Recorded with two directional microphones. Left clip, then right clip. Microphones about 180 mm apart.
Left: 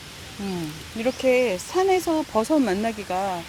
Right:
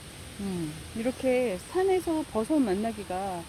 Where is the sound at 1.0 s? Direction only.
25° left (ahead or behind).